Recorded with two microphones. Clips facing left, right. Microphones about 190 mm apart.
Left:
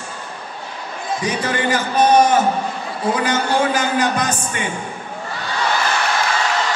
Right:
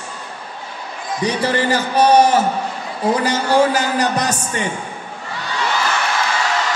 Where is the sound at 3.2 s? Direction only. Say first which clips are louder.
Right 4 dB; 35° right (ahead or behind).